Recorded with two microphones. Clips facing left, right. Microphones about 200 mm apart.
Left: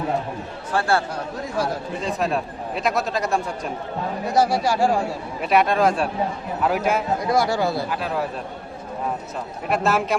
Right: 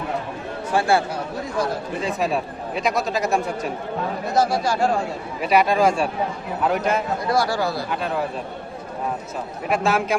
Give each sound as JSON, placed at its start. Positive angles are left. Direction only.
{"t": 0.7, "sound": "speech", "side_deg": -10}
{"t": 2.0, "sound": "a man's voice", "side_deg": 0}
{"t": 4.4, "sound": "speech", "side_deg": 15}
{"t": 5.4, "sound": "a man's voice", "side_deg": 0}
{"t": 7.3, "sound": "speech", "side_deg": 20}
{"t": 7.9, "sound": "a man's voice", "side_deg": 0}
{"t": 9.6, "sound": "a man's voice", "side_deg": 0}